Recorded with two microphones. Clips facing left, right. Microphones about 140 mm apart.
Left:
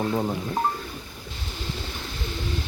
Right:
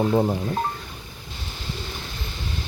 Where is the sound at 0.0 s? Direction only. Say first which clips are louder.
Right 5 dB; 15° right (ahead or behind).